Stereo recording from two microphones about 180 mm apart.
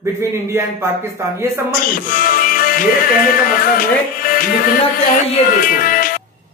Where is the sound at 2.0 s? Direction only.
50° left (ahead or behind).